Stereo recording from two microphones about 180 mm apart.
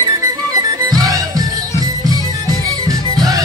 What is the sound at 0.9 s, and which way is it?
Music, 20° right (ahead or behind).